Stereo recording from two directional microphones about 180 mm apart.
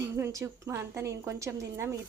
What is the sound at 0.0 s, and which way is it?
A woman's voice, 20° right (ahead or behind).